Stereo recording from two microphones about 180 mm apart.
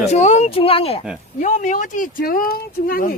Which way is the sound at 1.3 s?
45° left (ahead or behind).